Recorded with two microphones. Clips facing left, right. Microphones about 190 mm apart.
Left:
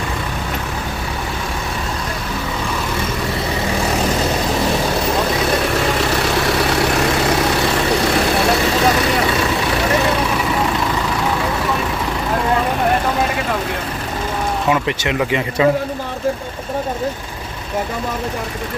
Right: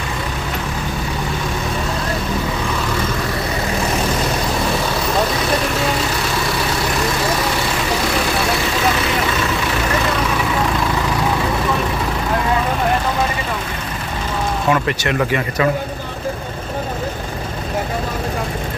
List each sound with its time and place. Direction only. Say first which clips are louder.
14.7 s speech: right 1 dB; 15° left (ahead or behind)